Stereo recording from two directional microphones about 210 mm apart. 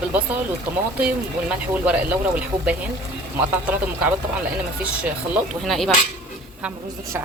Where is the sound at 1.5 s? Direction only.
5° right (ahead or behind).